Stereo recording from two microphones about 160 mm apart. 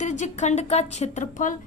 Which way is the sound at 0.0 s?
50° left (ahead or behind).